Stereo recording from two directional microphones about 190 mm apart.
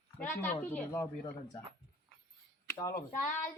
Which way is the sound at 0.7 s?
10° left (ahead or behind).